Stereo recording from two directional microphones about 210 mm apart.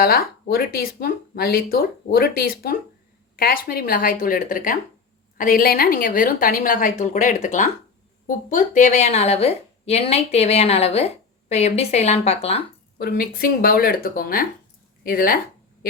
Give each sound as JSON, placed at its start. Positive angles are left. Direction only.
{"t": 0.0, "sound": "a woman's voice", "side_deg": 45}
{"t": 13.0, "sound": "speech", "side_deg": 45}